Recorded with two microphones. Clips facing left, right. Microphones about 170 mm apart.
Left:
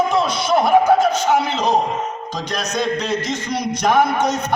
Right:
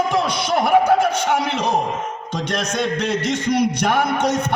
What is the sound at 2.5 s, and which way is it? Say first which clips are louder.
A man's voice: left 1 dB; 65° right (ahead or behind).